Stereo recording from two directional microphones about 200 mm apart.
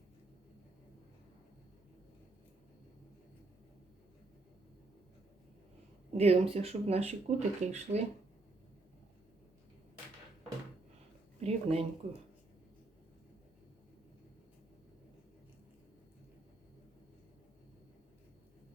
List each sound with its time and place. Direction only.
6.1 s speech: 30° right (ahead or behind)
11.3 s speech: 30° right (ahead or behind)